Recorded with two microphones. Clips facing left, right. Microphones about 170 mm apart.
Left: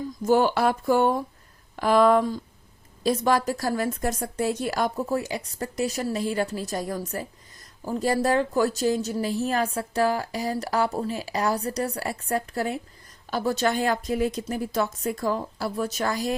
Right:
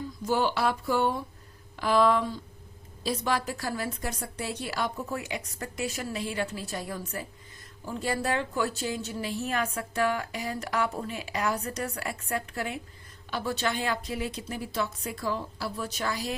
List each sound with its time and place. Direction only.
0.2 s a woman's voice: 50° left (ahead or behind)